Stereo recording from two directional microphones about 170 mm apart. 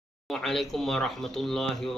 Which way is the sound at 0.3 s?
Centre (ahead or behind).